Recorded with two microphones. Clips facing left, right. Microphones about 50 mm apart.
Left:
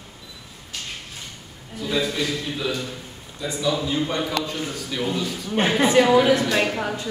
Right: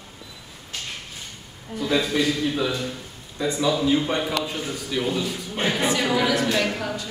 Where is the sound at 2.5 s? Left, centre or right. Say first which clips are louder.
Right 2 dB; centre.